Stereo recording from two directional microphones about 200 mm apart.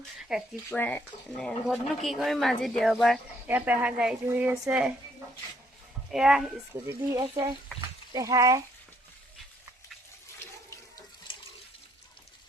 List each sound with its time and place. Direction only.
0.2 s a sound: 5° right (ahead or behind)
0.7 s speech: 10° left (ahead or behind); by 4.9 s 5° right (ahead or behind)
6.1 s speech: 5° right (ahead or behind)
6.7 s speech: 15° right (ahead or behind)